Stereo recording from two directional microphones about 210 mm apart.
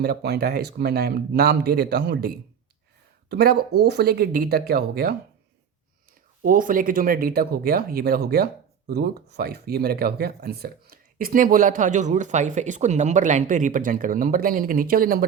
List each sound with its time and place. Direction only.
0.0 s speech: 50° right (ahead or behind)
6.4 s speech: 40° right (ahead or behind)